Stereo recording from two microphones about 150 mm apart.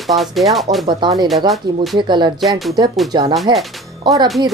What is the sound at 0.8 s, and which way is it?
Speech, 30° right (ahead or behind).